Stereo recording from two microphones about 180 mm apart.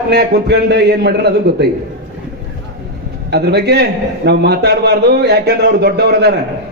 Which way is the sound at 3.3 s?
65° right (ahead or behind).